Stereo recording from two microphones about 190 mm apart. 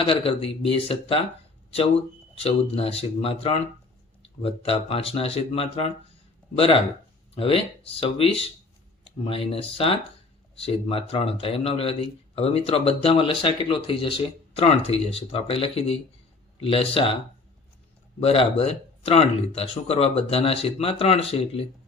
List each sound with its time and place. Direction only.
0.0 s a man's voice: 30° left (ahead or behind)
2.3 s a man's voice: 30° left (ahead or behind)
18.2 s speech: 30° left (ahead or behind)